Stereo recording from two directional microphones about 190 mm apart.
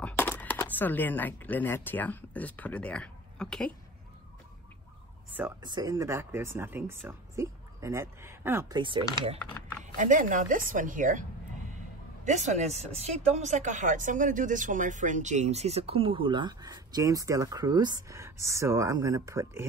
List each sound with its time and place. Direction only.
0.0 s speech: 10° left (ahead or behind)
5.6 s speech: 20° right (ahead or behind)
9.9 s speech: 45° right (ahead or behind); by 19.6 s 15° right (ahead or behind)